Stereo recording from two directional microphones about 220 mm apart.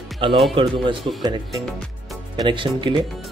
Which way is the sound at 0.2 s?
25° right (ahead or behind).